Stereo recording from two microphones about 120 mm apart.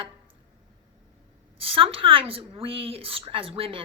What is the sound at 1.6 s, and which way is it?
A woman's voice, 50° right (ahead or behind).